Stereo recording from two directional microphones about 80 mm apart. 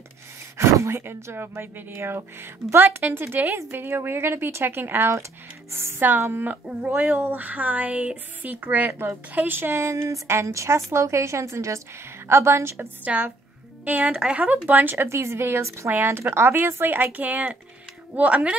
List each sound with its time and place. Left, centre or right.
0.6 s a woman's voice: right
13.0 s speech: centre